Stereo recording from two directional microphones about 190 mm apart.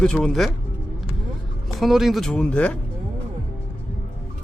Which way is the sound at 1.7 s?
Centre (ahead or behind).